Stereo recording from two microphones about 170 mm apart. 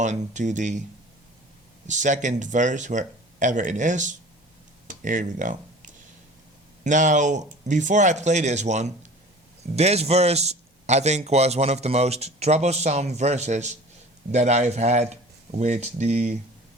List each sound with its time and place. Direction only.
0.0 s speech: 45° right (ahead or behind)
1.9 s a man's voice: 45° right (ahead or behind)